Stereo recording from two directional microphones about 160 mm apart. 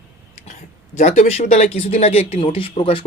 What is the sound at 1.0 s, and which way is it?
Speech, 45° left (ahead or behind).